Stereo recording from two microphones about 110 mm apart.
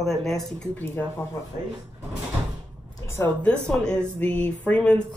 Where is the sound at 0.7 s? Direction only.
20° left (ahead or behind).